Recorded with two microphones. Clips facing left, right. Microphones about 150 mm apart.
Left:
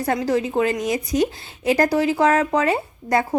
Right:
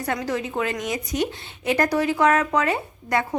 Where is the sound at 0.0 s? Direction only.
35° left (ahead or behind).